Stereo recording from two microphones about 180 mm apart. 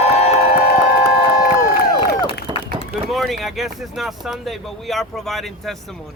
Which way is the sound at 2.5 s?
25° right (ahead or behind).